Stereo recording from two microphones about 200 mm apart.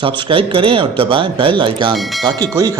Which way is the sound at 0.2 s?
25° right (ahead or behind).